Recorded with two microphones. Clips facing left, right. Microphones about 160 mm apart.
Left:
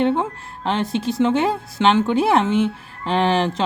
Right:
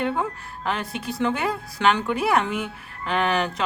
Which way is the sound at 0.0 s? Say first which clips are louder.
Left 6 dB; 25° left (ahead or behind).